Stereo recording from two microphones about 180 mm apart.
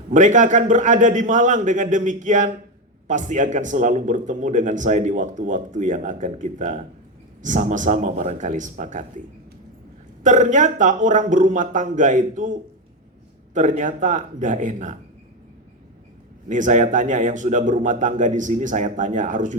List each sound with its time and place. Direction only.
0.1 s a man's voice: 45° right (ahead or behind)
10.2 s a man's voice: 45° right (ahead or behind)
13.5 s a man's voice: 45° right (ahead or behind)
16.5 s a man's voice: 45° right (ahead or behind)